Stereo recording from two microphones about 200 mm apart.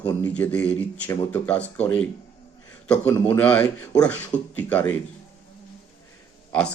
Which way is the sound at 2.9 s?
10° left (ahead or behind).